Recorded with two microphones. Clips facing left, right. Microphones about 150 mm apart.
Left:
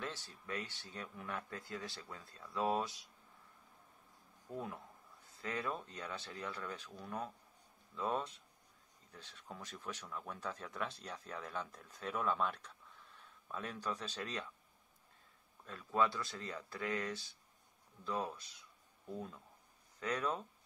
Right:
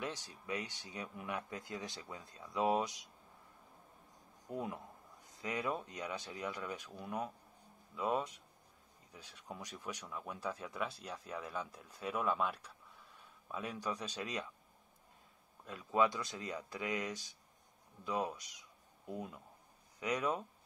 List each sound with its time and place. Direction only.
0.0 s speech: 15° right (ahead or behind)
4.5 s speech: 15° right (ahead or behind)
15.6 s speech: 15° right (ahead or behind)